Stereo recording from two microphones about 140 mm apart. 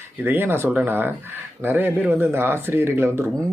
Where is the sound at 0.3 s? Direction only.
15° right (ahead or behind).